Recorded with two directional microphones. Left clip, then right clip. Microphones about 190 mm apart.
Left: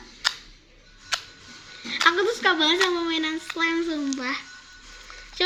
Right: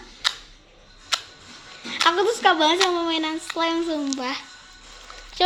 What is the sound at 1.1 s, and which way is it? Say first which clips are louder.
Music: right 3 dB; 15° right (ahead or behind).